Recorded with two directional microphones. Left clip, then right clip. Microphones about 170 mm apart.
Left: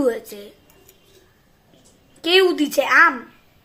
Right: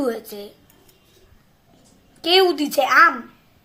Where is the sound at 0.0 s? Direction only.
15° left (ahead or behind).